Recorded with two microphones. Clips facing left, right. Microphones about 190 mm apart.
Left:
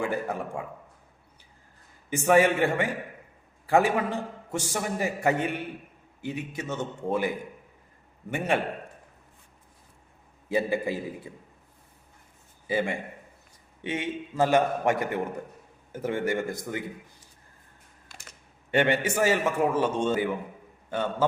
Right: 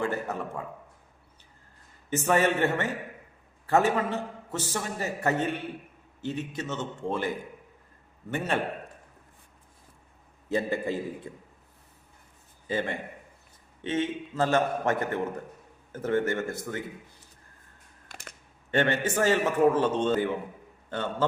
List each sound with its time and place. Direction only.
0.0 s a man's voice: 10° left (ahead or behind)
2.0 s a man's voice: 10° left (ahead or behind)
8.3 s a man's voice: 15° left (ahead or behind)
10.5 s a man's voice: 10° left (ahead or behind)
12.6 s a man's voice: 10° left (ahead or behind)
18.1 s computer keyboard: 55° right (ahead or behind)
18.7 s a man's voice: 15° left (ahead or behind)